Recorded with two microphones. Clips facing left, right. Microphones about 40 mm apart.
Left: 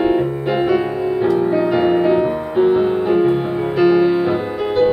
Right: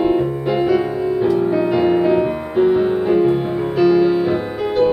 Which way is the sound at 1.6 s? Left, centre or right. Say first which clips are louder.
Even; centre.